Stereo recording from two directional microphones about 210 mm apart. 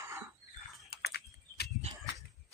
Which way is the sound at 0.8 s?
50° left (ahead or behind).